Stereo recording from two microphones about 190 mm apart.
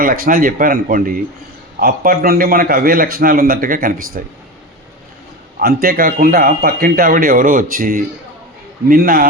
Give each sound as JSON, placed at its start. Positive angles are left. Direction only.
{"t": 0.0, "sound": "a man's voice", "side_deg": -50}
{"t": 5.5, "sound": "a man's voice", "side_deg": -50}